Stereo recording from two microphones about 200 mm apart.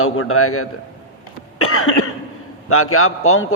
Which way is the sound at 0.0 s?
90° left.